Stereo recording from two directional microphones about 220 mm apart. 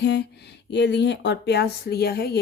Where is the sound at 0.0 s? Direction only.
50° left (ahead or behind).